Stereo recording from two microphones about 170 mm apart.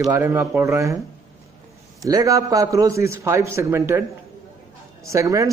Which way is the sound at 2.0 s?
20° right (ahead or behind).